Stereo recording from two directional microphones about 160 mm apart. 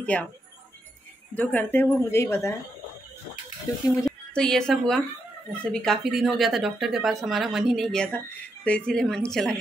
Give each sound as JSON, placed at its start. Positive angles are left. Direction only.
{"t": 0.0, "sound": "speech", "side_deg": 10}
{"t": 1.3, "sound": "a woman's voice", "side_deg": 10}
{"t": 3.9, "sound": "speech", "side_deg": 5}